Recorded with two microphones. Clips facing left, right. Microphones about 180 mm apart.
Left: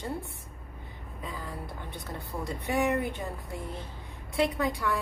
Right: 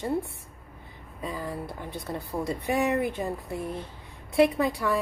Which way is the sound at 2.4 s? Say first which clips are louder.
Right 1 dB; 25° right (ahead or behind).